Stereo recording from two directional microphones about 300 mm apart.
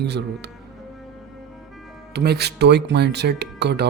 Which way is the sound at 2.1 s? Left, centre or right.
Right.